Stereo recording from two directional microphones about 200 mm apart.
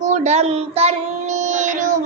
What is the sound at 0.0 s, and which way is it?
Child singing, 35° right (ahead or behind).